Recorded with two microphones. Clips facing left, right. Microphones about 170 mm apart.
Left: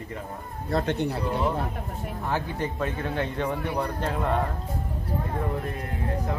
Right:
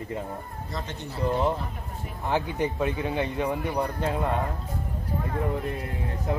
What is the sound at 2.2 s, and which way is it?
Speech, 15° right (ahead or behind).